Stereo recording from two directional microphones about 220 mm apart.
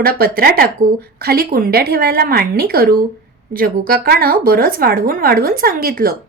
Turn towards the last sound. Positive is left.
turn(degrees=-40)  # may be behind; listen again after turning